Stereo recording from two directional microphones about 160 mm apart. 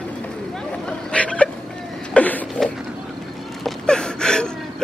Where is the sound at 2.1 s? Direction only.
10° left (ahead or behind).